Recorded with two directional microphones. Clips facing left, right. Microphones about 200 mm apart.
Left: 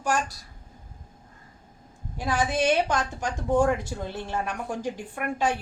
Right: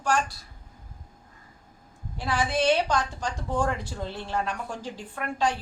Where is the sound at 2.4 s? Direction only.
15° left (ahead or behind).